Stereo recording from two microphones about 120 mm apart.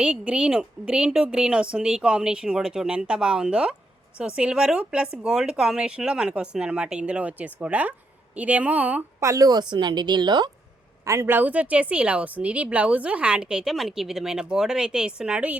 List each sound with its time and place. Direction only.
0.0 s a woman's voice: 10° right (ahead or behind)
9.2 s a woman's voice: 25° right (ahead or behind)
11.0 s a woman's voice: 20° right (ahead or behind)